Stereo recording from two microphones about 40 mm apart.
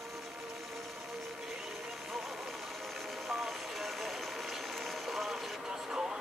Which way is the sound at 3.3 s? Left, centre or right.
Centre.